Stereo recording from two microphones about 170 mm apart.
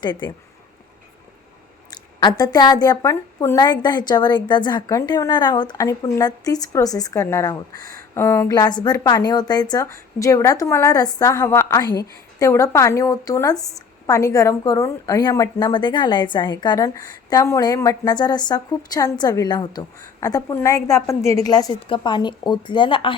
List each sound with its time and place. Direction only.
0.0 s a woman's voice: 25° left (ahead or behind)
1.9 s a woman's voice: 25° left (ahead or behind)